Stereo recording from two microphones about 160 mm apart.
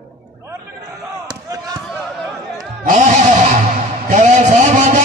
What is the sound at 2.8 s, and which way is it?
Neigh, 50° right (ahead or behind).